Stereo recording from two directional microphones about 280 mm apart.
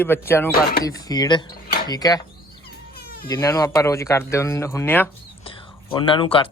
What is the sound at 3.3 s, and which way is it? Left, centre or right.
Speech, centre.